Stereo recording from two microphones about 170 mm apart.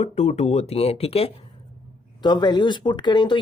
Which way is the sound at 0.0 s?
40° left (ahead or behind).